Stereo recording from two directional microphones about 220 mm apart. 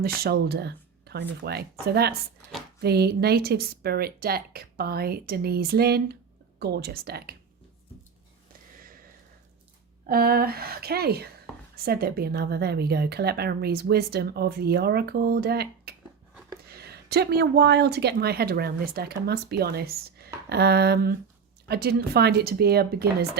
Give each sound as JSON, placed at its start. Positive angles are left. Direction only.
{"t": 0.2, "sound": "a woman's voice", "side_deg": -45}
{"t": 10.1, "sound": "a woman's voice", "side_deg": -45}